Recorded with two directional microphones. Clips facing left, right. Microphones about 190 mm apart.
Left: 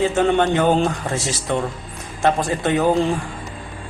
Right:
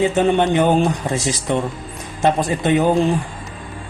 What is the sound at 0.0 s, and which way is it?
A man's voice, 20° right (ahead or behind).